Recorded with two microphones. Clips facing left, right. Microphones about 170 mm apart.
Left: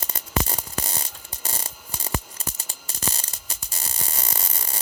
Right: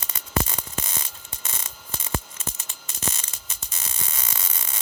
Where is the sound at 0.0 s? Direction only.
35° left (ahead or behind).